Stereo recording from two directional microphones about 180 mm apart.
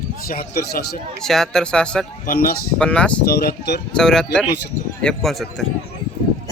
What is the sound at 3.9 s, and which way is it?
Speech, 5° left (ahead or behind).